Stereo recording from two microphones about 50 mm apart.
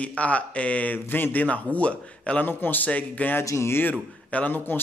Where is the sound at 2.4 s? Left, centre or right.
Left.